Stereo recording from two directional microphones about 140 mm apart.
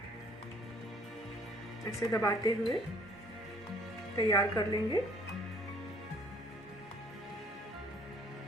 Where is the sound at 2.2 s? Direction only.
25° left (ahead or behind).